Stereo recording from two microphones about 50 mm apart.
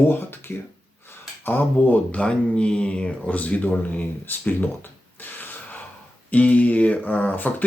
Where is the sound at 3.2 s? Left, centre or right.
Left.